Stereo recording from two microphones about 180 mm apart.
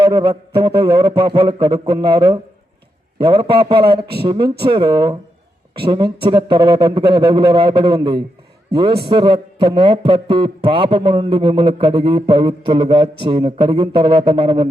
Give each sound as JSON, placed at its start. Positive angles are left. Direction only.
{"t": 0.0, "sound": "a man's voice", "side_deg": -25}